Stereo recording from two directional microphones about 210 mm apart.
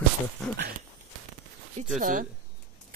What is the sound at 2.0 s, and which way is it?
Speech, 40° right (ahead or behind).